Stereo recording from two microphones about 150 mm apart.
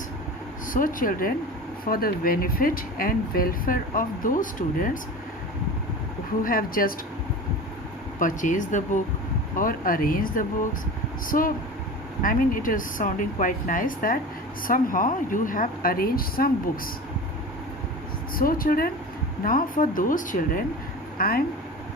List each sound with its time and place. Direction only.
0.7 s speech: 65° left (ahead or behind)
1.8 s speech: 80° left; by 4.9 s 65° left (ahead or behind)
6.4 s speech: 70° left (ahead or behind)
8.2 s speech: 60° left (ahead or behind); by 16.9 s 75° left (ahead or behind)
18.3 s speech: 70° left (ahead or behind)
21.2 s speech: 80° left